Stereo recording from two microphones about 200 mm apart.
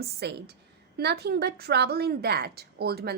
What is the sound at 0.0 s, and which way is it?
A woman's voice, 55° right (ahead or behind).